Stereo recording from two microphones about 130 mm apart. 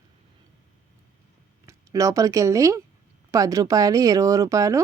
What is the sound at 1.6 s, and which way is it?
Speech, 25° right (ahead or behind).